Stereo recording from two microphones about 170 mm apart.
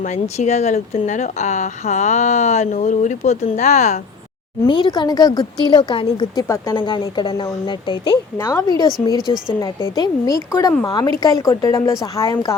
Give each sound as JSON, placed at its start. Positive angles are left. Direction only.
{"t": 0.0, "sound": "speech", "side_deg": 45}
{"t": 4.6, "sound": "speech", "side_deg": 30}